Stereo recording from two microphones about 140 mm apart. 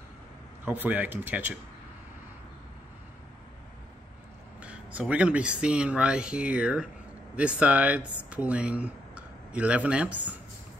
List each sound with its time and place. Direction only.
0.7 s speech: 10° right (ahead or behind)
4.6 s speech: 10° right (ahead or behind)